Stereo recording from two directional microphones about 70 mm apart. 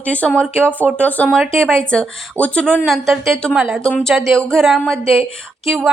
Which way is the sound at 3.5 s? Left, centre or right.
Centre.